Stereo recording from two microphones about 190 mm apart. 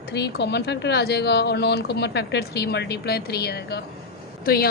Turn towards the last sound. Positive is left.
turn(degrees=50)  # may be behind; listen again after turning